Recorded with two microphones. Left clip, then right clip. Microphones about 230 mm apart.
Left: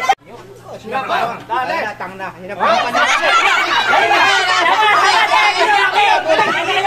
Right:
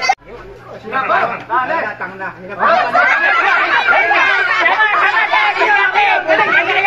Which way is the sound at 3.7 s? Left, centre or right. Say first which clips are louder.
Right 1 dB; left.